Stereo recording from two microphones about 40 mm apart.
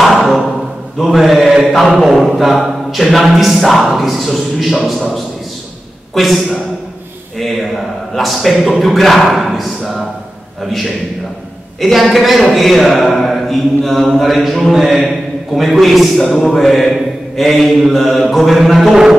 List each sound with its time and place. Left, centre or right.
0.0 s a sound: centre
0.9 s mantra: centre
2.2 s a man's voice: centre